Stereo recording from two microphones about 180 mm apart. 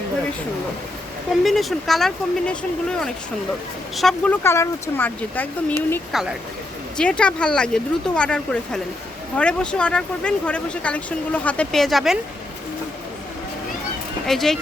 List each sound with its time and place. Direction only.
1.5 s speech: centre (ahead or behind)
3.9 s speech: 5° left (ahead or behind)
6.1 s speech: centre (ahead or behind)
14.3 s speech: centre (ahead or behind)